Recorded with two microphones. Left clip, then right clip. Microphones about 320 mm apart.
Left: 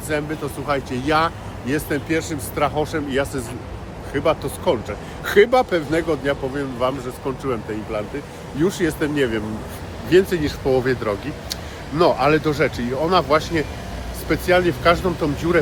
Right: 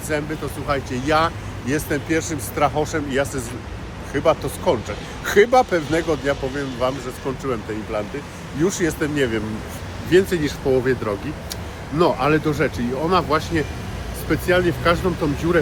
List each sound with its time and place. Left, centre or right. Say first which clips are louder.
0.1 s speech: left 1 dB; centre